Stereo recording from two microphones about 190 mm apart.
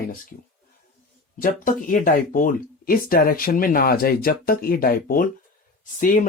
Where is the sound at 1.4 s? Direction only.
45° left (ahead or behind).